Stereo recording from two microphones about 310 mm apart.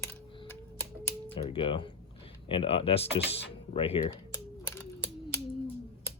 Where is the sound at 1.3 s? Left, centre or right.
Centre.